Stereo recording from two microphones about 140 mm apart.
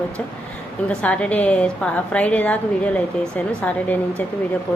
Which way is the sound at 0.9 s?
10° left (ahead or behind).